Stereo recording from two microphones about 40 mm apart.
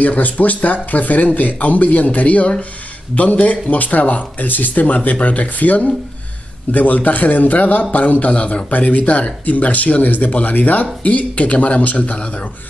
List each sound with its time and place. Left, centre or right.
0.0 s speech: left